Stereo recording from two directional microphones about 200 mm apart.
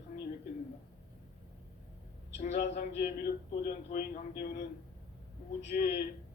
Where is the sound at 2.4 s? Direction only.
40° left (ahead or behind).